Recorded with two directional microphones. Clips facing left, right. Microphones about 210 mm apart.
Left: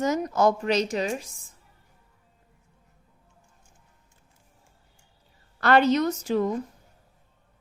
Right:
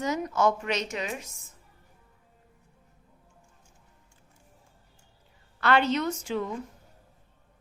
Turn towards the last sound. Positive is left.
turn(degrees=40)  # may be behind; listen again after turning